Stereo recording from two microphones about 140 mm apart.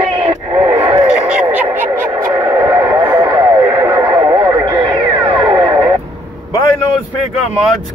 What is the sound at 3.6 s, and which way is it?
Radio, 25° right (ahead or behind).